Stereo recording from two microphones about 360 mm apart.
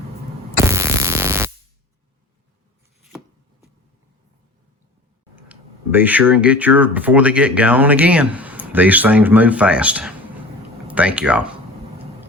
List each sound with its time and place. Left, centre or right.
0.5 s fart: centre
5.5 s speech: centre